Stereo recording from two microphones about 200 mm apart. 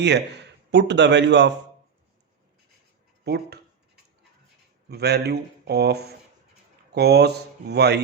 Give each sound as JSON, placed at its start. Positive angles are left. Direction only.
{"t": 0.0, "sound": "speech", "side_deg": -60}
{"t": 3.2, "sound": "a man's voice", "side_deg": -55}
{"t": 4.9, "sound": "a man's voice", "side_deg": -55}